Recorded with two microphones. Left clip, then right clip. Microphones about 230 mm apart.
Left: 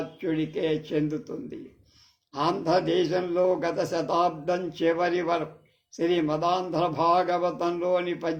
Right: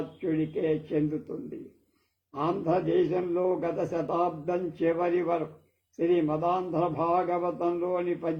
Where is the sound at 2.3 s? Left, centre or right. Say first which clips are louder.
Left 3 dB; left.